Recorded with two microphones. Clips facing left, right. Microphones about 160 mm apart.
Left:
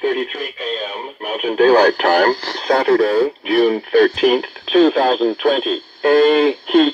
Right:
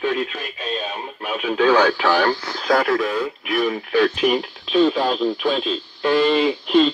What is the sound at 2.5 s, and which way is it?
Speech, 25° left (ahead or behind).